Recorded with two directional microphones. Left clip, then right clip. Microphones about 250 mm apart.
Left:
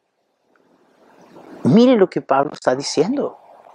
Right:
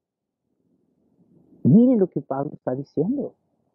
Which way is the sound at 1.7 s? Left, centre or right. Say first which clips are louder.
Left 6 dB; centre.